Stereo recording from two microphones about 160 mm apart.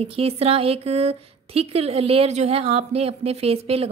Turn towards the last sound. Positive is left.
turn(degrees=-40)  # may be behind; listen again after turning